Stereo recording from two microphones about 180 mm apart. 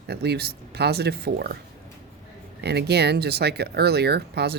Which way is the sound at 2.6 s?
65° right (ahead or behind).